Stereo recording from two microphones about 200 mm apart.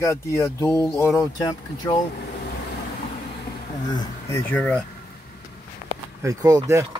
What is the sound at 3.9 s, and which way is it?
Speech, 10° left (ahead or behind).